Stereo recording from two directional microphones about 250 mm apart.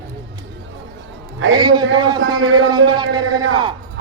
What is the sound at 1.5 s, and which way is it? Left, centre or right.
A man's voice, centre.